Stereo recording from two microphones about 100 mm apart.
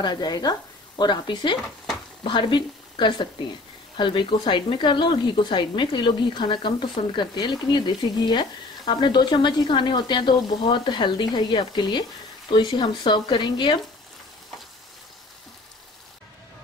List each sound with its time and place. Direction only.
0.0 s speech: 45° left (ahead or behind)